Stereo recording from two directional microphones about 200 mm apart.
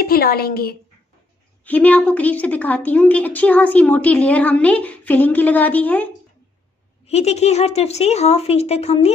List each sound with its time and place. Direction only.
0.0 s a woman's voice: 50° left (ahead or behind)
1.6 s a woman's voice: 5° left (ahead or behind)
7.1 s speech: 30° left (ahead or behind)